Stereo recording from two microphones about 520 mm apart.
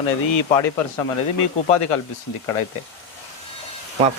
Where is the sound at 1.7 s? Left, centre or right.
Left.